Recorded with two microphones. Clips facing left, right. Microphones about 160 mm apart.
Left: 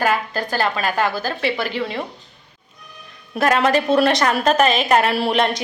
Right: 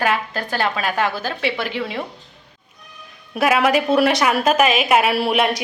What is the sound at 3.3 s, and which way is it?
A woman's voice, 5° right (ahead or behind).